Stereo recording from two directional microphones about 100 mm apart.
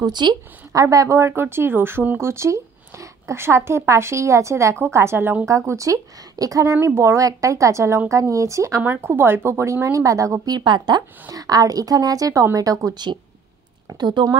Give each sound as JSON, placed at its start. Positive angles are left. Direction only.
{"t": 0.0, "sound": "speech", "side_deg": -45}
{"t": 0.7, "sound": "a woman's voice", "side_deg": -35}
{"t": 8.8, "sound": "a woman's voice", "side_deg": -20}
{"t": 11.2, "sound": "a woman's voice", "side_deg": -35}